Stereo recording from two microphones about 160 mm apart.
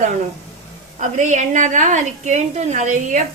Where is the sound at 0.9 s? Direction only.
50° right (ahead or behind).